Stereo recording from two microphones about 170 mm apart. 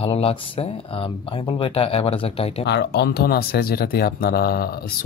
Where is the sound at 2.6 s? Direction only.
80° left.